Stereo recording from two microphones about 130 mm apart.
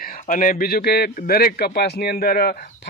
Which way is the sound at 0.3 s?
90° left.